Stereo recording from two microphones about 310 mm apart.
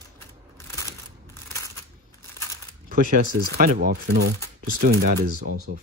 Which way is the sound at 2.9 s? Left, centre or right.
Right.